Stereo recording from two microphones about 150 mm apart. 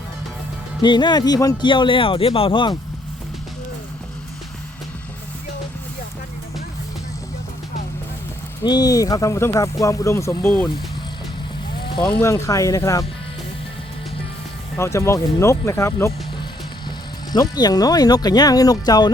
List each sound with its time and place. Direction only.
0.8 s speech: 30° left (ahead or behind)
8.6 s speech: 25° left (ahead or behind)
12.2 s speech: 20° left (ahead or behind)
14.8 s speech: 20° left (ahead or behind)
17.3 s speech: 25° left (ahead or behind)